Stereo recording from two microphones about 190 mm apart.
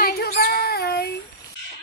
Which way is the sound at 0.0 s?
55° left (ahead or behind).